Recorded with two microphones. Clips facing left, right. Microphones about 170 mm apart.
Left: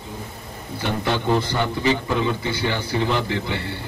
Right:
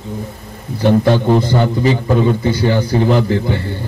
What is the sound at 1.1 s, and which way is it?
A man's voice, 45° right (ahead or behind).